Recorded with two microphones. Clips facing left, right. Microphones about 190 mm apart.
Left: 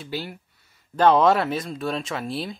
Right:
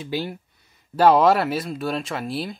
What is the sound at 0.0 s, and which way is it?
Speech, 15° right (ahead or behind).